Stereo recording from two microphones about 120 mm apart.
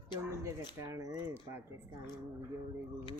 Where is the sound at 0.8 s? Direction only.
25° right (ahead or behind).